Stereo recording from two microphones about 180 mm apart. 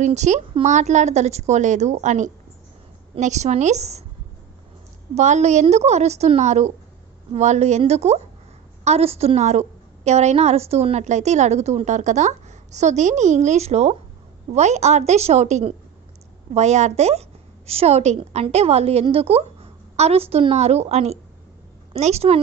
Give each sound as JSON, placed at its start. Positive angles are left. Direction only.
{"t": 0.0, "sound": "a woman's voice", "side_deg": -40}
{"t": 5.1, "sound": "a woman's voice", "side_deg": -40}